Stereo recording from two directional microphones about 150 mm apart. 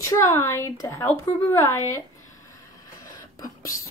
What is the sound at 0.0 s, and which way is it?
A woman's voice, 20° left (ahead or behind).